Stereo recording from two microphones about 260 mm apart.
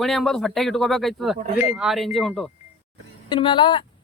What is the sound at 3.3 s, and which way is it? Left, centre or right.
Speech, centre.